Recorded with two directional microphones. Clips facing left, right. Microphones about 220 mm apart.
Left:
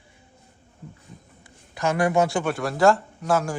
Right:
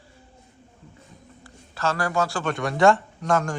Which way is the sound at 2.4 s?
Centre (ahead or behind).